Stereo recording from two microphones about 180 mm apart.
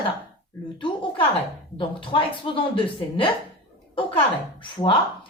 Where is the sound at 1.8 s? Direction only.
30° left (ahead or behind).